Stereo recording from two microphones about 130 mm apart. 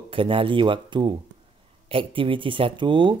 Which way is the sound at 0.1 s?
45° right (ahead or behind).